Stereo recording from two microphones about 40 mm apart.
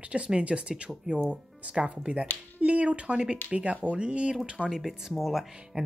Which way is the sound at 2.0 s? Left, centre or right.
Right.